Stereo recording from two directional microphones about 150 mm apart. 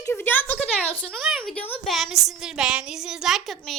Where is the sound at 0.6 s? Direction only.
40° left (ahead or behind).